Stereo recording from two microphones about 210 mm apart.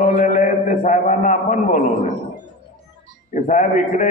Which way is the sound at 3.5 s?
35° left (ahead or behind).